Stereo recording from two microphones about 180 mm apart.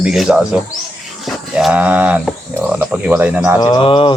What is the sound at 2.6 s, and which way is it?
Speech, 10° right (ahead or behind).